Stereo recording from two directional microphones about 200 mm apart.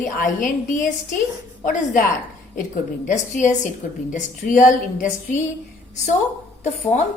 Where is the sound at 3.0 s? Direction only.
40° left (ahead or behind).